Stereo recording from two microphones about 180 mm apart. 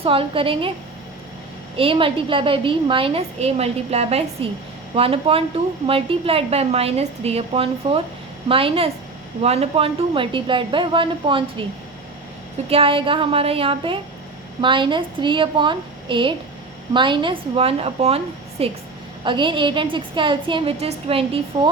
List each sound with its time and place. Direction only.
0.0 s a woman's voice: 30° right (ahead or behind)
1.7 s a woman's voice: 30° right (ahead or behind)
12.6 s a woman's voice: 30° right (ahead or behind)